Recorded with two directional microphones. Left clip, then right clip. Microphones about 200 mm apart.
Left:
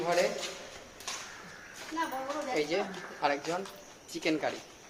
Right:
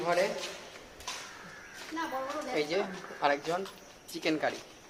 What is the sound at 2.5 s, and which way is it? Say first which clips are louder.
Speech: even; 20° right (ahead or behind).